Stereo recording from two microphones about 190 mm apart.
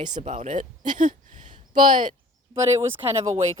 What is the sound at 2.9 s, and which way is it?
Speech, 30° right (ahead or behind).